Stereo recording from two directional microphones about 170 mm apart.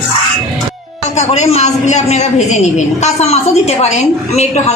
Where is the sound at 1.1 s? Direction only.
40° left (ahead or behind).